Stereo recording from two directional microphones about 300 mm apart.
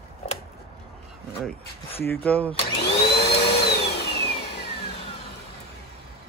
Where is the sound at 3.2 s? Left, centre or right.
Left.